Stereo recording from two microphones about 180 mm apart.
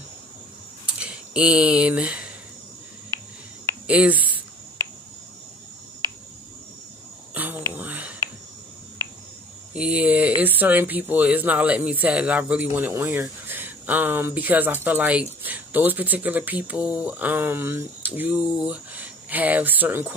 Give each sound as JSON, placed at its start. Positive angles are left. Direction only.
{"t": 0.8, "sound": "a sound", "side_deg": -5}
{"t": 3.8, "sound": "speech", "side_deg": -5}
{"t": 7.3, "sound": "whispering", "side_deg": -10}
{"t": 9.8, "sound": "speech", "side_deg": -5}